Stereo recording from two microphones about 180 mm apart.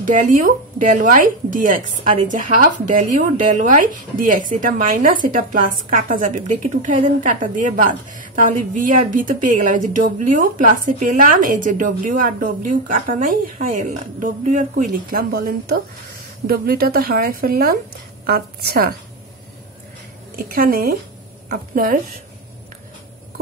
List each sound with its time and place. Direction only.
0.1 s a woman's voice: 50° right (ahead or behind)
20.3 s a woman's voice: 55° right (ahead or behind)